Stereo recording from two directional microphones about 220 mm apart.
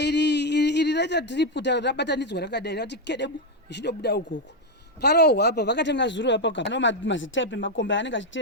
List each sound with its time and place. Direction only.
0.0 s speech: 50° left (ahead or behind)